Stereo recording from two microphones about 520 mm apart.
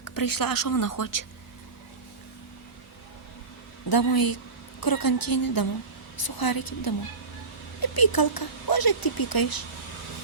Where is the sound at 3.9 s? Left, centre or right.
Left.